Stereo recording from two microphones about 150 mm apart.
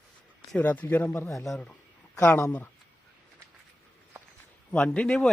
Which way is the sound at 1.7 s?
20° left (ahead or behind).